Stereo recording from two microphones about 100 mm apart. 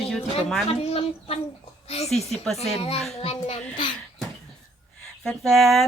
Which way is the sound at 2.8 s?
80° left.